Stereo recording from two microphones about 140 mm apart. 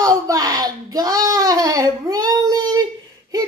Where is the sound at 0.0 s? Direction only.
25° right (ahead or behind).